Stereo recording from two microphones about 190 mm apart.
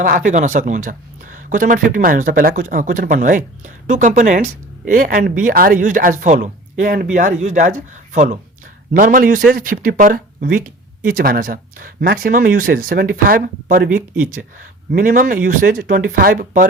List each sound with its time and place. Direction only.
0.0 s speech: 45° right (ahead or behind)